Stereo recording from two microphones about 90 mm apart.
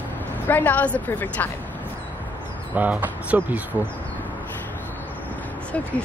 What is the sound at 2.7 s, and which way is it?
Speech, 15° right (ahead or behind).